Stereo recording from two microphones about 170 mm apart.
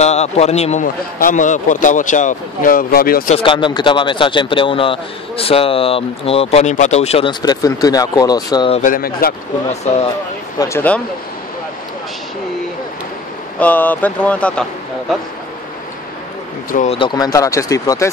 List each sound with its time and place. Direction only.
0.0 s a man's voice: 40° left (ahead or behind); by 3.3 s 60° left (ahead or behind)
3.3 s a man's voice: 30° left (ahead or behind)
8.7 s speech: 50° left (ahead or behind)
10.6 s speech: 15° left (ahead or behind)
13.6 s speech: 10° left (ahead or behind)
16.7 s a man's voice: 40° left (ahead or behind)
17.0 s speech: 25° left (ahead or behind)